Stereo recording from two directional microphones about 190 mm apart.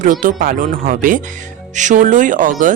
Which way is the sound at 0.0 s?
45° right (ahead or behind).